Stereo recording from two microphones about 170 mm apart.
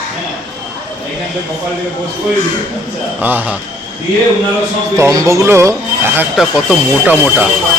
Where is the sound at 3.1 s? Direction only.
10° right (ahead or behind).